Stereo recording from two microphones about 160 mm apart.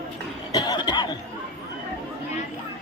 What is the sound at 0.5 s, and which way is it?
Chuckle, 25° left (ahead or behind).